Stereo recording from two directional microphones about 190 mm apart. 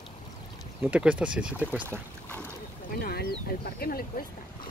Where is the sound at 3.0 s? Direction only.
55° left (ahead or behind).